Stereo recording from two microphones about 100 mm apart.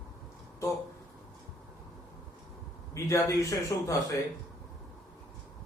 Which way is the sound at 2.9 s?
30° left (ahead or behind).